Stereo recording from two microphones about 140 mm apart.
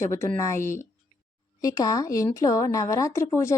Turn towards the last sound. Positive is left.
turn(degrees=20)  # may be behind; listen again after turning